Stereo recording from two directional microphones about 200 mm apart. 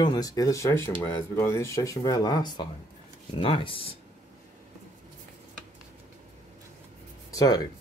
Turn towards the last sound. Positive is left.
turn(degrees=15)  # may be behind; listen again after turning